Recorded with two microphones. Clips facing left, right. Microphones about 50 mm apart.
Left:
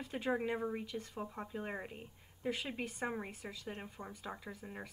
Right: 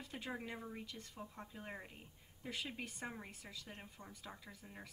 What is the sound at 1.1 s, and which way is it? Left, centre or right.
Speech, left.